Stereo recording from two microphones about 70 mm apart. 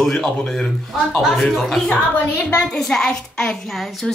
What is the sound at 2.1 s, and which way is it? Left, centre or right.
A woman's voice, centre.